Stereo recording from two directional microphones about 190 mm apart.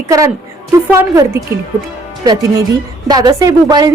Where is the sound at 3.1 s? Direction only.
20° right (ahead or behind).